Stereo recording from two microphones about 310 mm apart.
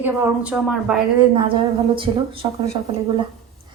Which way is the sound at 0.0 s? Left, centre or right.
Centre.